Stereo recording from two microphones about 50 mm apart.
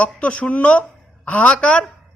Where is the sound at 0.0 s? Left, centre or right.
Left.